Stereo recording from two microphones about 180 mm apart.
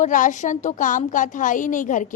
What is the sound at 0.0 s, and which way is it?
A woman's voice, 45° left (ahead or behind).